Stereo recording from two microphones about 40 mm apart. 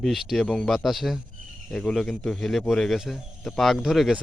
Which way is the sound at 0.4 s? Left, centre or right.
Centre.